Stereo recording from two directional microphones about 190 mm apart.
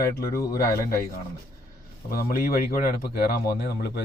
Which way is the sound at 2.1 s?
50° left (ahead or behind).